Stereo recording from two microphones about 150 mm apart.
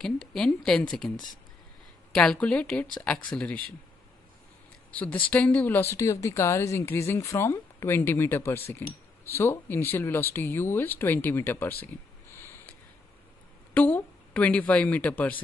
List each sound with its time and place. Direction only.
0.0 s a woman's voice: 5° left (ahead or behind)
2.1 s speech: 5° left (ahead or behind)
4.9 s speech: 10° left (ahead or behind)
12.4 s a sound: 15° left (ahead or behind)
13.7 s speech: 10° left (ahead or behind)